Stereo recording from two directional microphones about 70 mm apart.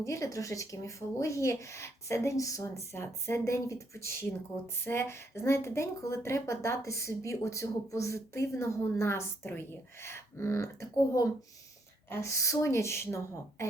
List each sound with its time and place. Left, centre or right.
0.0 s speech: left
2.9 s speech: left